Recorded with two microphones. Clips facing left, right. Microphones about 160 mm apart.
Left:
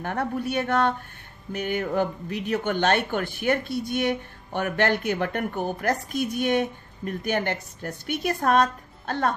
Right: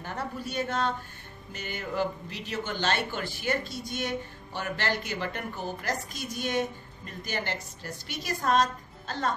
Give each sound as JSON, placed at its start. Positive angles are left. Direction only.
{"t": 0.0, "sound": "speech", "side_deg": 60}